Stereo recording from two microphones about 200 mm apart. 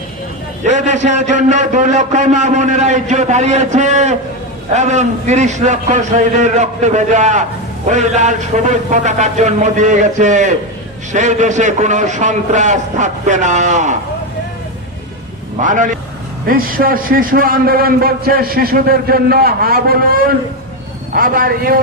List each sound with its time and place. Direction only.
0.6 s a man's voice: 35° right (ahead or behind)
15.6 s a man's voice: 40° right (ahead or behind)